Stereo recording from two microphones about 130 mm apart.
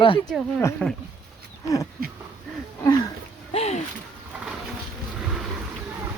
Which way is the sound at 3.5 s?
55° left (ahead or behind).